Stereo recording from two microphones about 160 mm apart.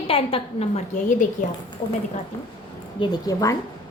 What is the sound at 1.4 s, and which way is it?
Speech, 55° left (ahead or behind).